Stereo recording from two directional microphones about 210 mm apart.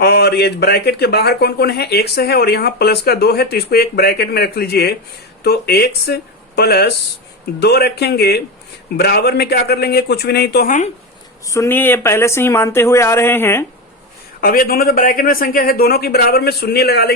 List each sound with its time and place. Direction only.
0.0 s a man's voice: 50° left (ahead or behind)
11.4 s speech: 15° left (ahead or behind)
14.4 s a man's voice: 45° left (ahead or behind)